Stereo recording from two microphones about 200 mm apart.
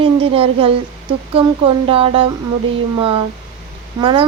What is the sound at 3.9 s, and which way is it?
Speech, 25° right (ahead or behind).